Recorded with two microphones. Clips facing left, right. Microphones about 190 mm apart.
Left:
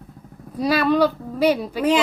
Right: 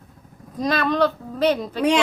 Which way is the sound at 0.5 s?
10° left (ahead or behind).